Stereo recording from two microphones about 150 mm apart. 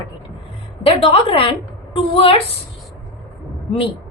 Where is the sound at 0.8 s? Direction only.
40° left (ahead or behind).